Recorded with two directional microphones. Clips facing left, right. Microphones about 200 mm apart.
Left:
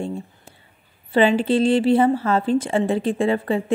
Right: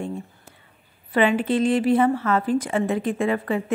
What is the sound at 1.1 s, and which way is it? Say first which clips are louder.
A woman's voice: left 3 dB; 30° left (ahead or behind).